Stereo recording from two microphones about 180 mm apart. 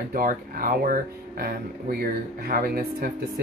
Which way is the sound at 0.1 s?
50° right (ahead or behind).